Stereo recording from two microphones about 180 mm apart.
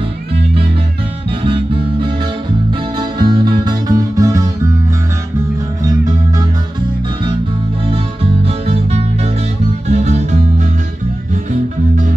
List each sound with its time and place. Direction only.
1.4 s music: 30° right (ahead or behind)
7.9 s music: 35° right (ahead or behind)